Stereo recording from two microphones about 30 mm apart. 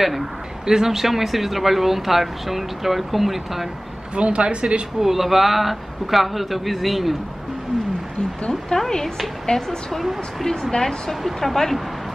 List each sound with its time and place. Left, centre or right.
0.7 s speech: centre
4.1 s speech: right
5.0 s a man's voice: centre
8.7 s speech: centre
9.5 s speech: left
10.4 s speech: centre
11.2 s speech: centre